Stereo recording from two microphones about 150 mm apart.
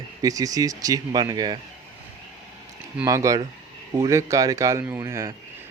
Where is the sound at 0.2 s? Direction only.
25° right (ahead or behind).